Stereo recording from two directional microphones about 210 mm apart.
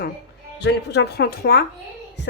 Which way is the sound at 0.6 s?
55° left (ahead or behind).